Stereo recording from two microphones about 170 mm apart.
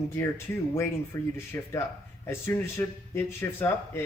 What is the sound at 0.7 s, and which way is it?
A man's voice, 15° left (ahead or behind).